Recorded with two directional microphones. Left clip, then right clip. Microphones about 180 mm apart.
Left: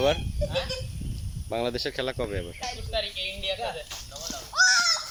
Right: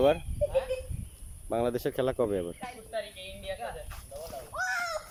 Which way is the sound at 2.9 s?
10° left (ahead or behind).